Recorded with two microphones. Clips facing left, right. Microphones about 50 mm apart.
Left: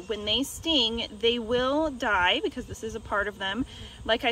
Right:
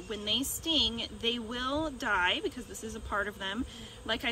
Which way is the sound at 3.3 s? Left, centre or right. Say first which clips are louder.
Left 5 dB; left.